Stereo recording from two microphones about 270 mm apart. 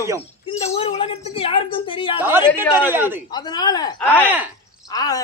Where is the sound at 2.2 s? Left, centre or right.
Centre.